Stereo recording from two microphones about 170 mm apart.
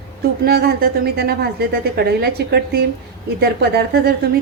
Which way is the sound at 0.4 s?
70° right (ahead or behind).